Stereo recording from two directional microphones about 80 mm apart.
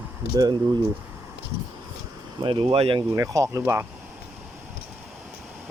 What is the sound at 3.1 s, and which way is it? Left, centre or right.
Speech, right.